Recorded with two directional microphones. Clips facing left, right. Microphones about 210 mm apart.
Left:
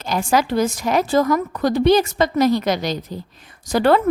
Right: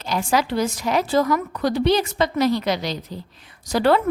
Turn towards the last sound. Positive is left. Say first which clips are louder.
# left 2 dB
turn(degrees=50)  # may be behind; listen again after turning